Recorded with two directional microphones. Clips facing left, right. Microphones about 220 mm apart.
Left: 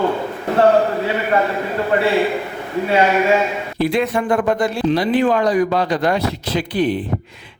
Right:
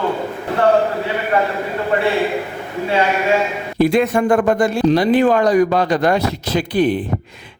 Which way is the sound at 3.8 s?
45° right (ahead or behind).